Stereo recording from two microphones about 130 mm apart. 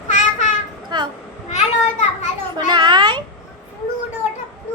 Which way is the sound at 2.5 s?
35° right (ahead or behind).